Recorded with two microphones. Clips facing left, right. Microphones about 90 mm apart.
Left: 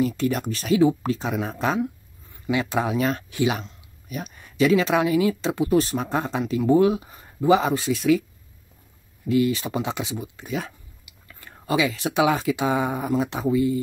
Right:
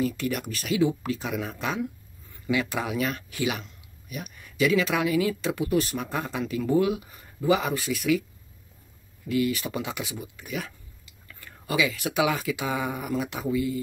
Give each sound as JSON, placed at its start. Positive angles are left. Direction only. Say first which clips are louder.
{"t": 0.0, "sound": "speech", "louder": "left 4 dB", "side_deg": 30}
{"t": 9.3, "sound": "speech", "louder": "left 4 dB", "side_deg": 25}